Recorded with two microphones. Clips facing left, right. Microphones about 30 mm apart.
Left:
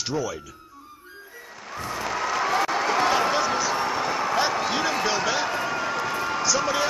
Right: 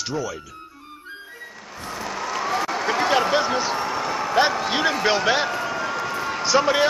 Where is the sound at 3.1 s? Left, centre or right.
Right.